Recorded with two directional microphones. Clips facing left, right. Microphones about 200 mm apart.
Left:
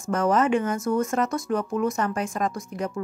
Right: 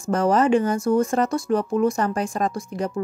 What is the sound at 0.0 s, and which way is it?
A woman's voice, 30° right (ahead or behind).